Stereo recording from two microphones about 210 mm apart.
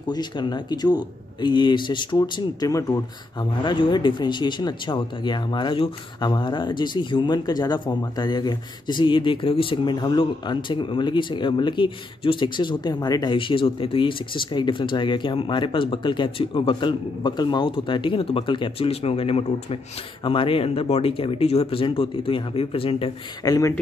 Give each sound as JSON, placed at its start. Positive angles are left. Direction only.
{"t": 0.1, "sound": "speech", "side_deg": 20}